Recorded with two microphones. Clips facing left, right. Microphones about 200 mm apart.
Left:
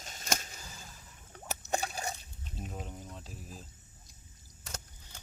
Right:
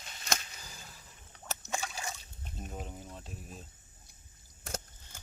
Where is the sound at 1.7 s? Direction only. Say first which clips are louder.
Left 4 dB; 40° left (ahead or behind).